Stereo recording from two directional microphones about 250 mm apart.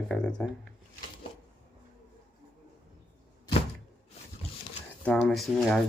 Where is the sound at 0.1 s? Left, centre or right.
Centre.